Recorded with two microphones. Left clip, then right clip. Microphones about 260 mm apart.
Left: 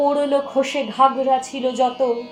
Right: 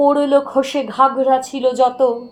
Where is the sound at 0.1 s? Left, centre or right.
Right.